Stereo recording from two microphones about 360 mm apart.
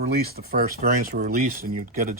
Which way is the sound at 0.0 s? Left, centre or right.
Right.